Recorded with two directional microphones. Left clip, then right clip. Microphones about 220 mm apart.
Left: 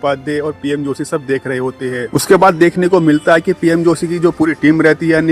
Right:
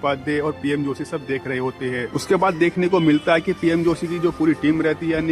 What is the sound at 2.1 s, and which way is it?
A man's voice, 40° left (ahead or behind).